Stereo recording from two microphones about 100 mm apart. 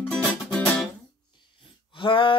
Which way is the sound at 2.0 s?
55° left (ahead or behind).